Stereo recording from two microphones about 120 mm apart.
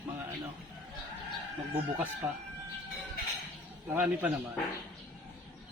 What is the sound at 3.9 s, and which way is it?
Speech, 15° right (ahead or behind).